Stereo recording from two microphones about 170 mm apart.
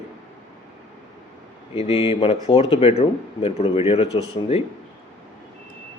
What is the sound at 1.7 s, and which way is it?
Speech, 35° left (ahead or behind).